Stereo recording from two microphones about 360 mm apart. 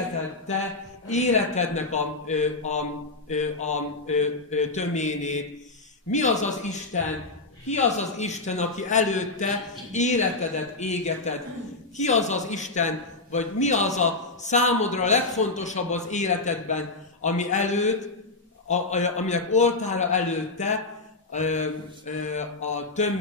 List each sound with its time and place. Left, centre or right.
1.0 s a man's voice: centre